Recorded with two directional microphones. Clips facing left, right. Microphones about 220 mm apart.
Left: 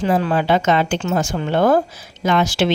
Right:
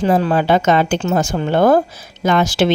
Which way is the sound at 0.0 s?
35° right (ahead or behind).